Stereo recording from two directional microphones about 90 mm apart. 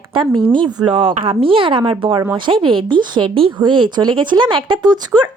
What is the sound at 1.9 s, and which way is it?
A woman's voice, 70° right (ahead or behind).